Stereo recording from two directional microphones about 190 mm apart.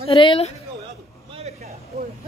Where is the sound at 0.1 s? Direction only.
25° left (ahead or behind).